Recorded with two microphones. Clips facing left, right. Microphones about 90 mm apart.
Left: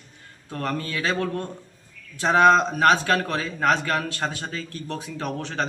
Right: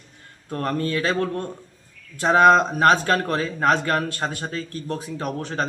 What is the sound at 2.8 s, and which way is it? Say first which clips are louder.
A man's voice: right 1 dB; 30° right (ahead or behind).